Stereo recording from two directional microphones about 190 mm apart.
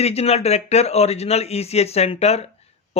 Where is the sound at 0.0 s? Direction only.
35° left (ahead or behind).